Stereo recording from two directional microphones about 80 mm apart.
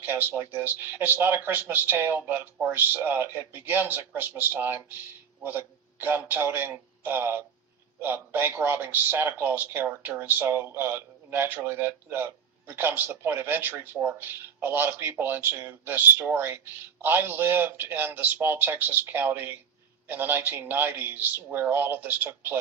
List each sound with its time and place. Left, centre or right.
0.0 s a man's voice: right